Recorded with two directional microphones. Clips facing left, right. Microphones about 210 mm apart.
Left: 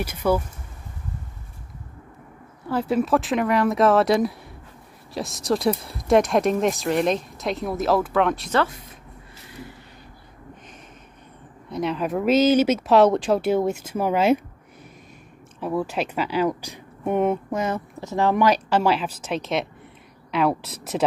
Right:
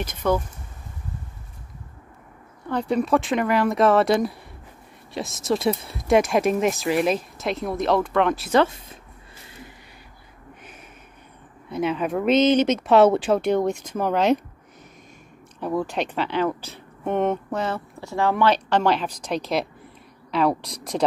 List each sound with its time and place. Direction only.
0.0 s speech: 10° left (ahead or behind)
2.7 s speech: 5° left (ahead or behind)
8.5 s speech: 15° right (ahead or behind)
11.7 s speech: centre (ahead or behind)
15.6 s speech: 5° left (ahead or behind)